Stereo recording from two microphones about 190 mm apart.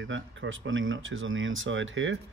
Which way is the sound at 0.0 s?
80° right.